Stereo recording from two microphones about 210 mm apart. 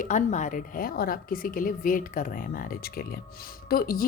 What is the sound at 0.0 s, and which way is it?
A woman's voice, 35° left (ahead or behind).